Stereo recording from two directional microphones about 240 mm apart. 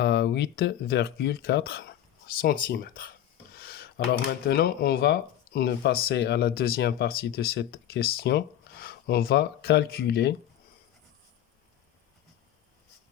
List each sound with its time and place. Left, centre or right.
0.0 s speech: left
3.5 s a sound: left
4.4 s speech: left